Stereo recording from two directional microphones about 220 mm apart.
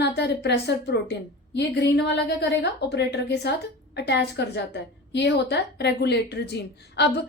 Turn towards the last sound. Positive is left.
turn(degrees=50)  # may be behind; listen again after turning